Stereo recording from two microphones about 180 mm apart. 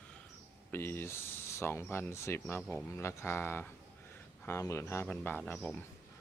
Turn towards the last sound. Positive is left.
turn(degrees=5)  # may be behind; listen again after turning